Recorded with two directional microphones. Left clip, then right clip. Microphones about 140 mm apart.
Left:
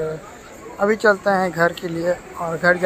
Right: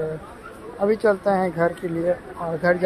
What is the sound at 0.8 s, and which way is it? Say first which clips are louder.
A man's voice: left 3 dB; 5° right (ahead or behind).